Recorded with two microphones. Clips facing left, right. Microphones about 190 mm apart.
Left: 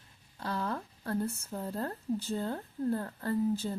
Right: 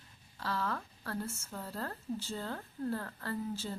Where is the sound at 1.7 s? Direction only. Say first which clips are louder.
Left 5 dB; 20° left (ahead or behind).